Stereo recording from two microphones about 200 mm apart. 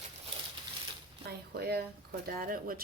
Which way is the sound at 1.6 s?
55° right (ahead or behind).